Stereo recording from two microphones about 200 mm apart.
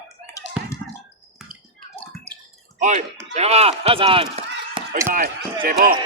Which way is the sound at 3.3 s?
30° right (ahead or behind).